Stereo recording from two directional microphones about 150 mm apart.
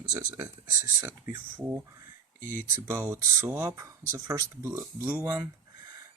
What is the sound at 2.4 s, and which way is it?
Speech, 65° right (ahead or behind).